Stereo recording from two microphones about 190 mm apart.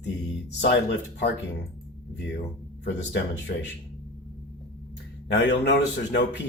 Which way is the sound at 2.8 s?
70° left (ahead or behind).